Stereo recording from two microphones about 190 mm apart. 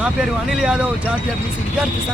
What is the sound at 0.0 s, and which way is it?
Speech, 5° right (ahead or behind).